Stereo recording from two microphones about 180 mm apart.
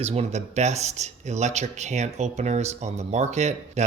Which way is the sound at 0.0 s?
35° right (ahead or behind).